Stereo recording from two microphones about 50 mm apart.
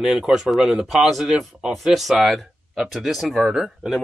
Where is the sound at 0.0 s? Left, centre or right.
Centre.